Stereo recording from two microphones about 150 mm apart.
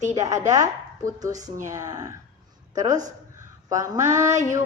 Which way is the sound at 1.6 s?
25° right (ahead or behind).